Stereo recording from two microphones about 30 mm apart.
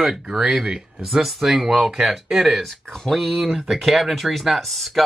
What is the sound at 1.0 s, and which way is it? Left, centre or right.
Speech, centre.